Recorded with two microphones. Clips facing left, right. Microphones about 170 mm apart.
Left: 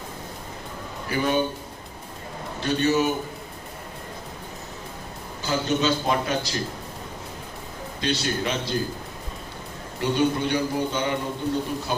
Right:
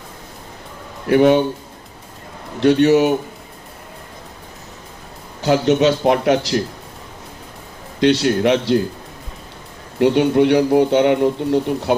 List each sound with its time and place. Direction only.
1.0 s speech: 70° right (ahead or behind)
2.6 s speech: 75° right (ahead or behind)
5.4 s speech: 75° right (ahead or behind)
8.0 s speech: 75° right (ahead or behind)
10.0 s speech: 75° right (ahead or behind)